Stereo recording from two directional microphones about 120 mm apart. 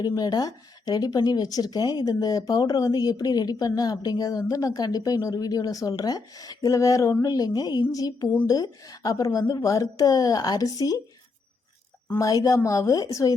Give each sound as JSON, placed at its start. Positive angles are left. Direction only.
{"t": 0.0, "sound": "speech", "side_deg": 35}
{"t": 12.1, "sound": "speech", "side_deg": 30}